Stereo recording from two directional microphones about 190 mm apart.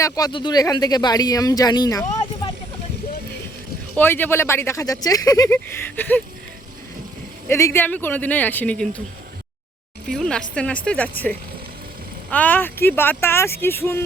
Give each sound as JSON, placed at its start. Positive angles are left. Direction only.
{"t": 0.0, "sound": "speech", "side_deg": 20}
{"t": 3.9, "sound": "speech", "side_deg": 10}
{"t": 7.4, "sound": "speech", "side_deg": 15}
{"t": 10.1, "sound": "a woman's voice", "side_deg": 5}
{"t": 12.3, "sound": "speech", "side_deg": 10}